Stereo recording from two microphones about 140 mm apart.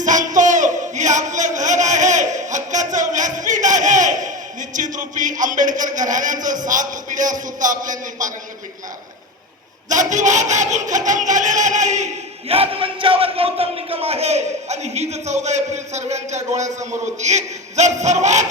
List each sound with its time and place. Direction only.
0.0 s a sound: 65° right (ahead or behind)
6.7 s a man's voice: 65° right (ahead or behind)
9.9 s speech: 60° right (ahead or behind)